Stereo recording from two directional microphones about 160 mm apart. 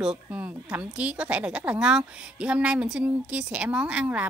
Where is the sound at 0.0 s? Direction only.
5° right (ahead or behind).